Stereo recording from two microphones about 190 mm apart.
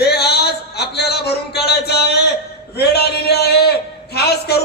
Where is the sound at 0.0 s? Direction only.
60° left (ahead or behind).